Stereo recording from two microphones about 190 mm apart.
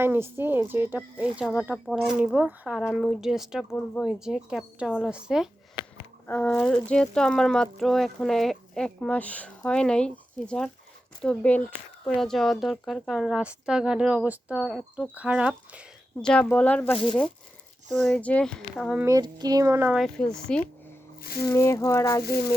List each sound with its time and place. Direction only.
0.0 s speech: 10° right (ahead or behind)
6.2 s speech: 5° left (ahead or behind)
16.2 s speech: 5° left (ahead or behind)
18.9 s speech: 15° right (ahead or behind)
20.0 s speech: 5° left (ahead or behind)
21.4 s speech: 15° left (ahead or behind)